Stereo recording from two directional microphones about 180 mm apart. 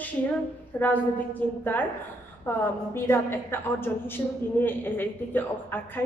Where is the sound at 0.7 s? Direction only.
10° left (ahead or behind).